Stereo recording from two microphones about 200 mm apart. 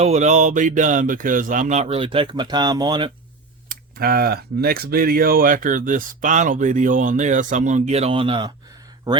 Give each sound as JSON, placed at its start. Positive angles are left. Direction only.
{"t": 0.0, "sound": "speech", "side_deg": -35}
{"t": 3.7, "sound": "speech", "side_deg": -50}